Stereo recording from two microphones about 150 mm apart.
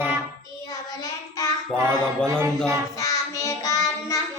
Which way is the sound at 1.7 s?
20° right (ahead or behind).